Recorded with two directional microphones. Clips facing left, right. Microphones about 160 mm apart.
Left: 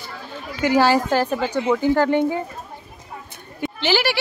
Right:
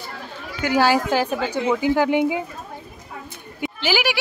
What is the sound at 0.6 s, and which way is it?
A woman's voice, centre (ahead or behind).